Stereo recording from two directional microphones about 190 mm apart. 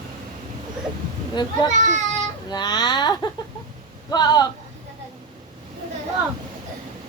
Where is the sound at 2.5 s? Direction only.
20° left (ahead or behind).